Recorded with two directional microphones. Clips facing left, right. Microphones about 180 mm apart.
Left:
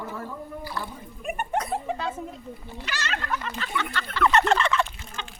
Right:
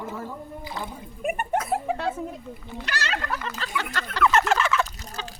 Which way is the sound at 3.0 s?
35° right (ahead or behind).